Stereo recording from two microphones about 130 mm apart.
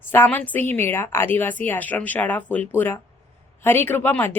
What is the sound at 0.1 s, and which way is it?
Speech, 15° left (ahead or behind).